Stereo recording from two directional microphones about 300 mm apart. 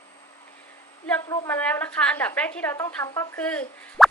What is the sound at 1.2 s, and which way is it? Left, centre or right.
A woman's voice, centre.